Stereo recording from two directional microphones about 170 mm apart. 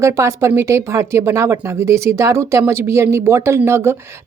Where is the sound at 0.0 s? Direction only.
15° right (ahead or behind).